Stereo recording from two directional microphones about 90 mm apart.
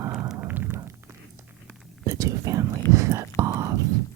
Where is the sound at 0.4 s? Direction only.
20° right (ahead or behind).